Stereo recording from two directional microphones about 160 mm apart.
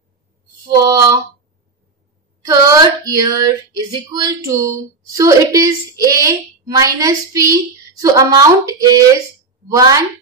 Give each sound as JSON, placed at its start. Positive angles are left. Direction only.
{"t": 0.7, "sound": "female singing", "side_deg": -20}
{"t": 2.4, "sound": "female singing", "side_deg": -25}